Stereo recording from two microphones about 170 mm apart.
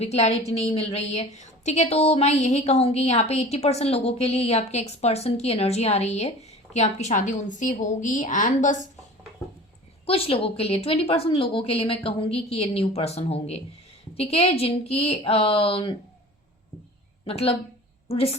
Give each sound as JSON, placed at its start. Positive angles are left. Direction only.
{"t": 0.0, "sound": "a woman's voice", "side_deg": 40}
{"t": 10.1, "sound": "a woman's voice", "side_deg": 35}
{"t": 17.2, "sound": "a woman's voice", "side_deg": 35}